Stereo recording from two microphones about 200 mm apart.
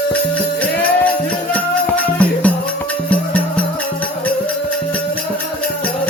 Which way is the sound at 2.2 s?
5° left (ahead or behind).